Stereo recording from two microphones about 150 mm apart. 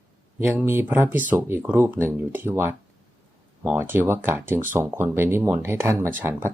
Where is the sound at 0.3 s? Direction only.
15° right (ahead or behind).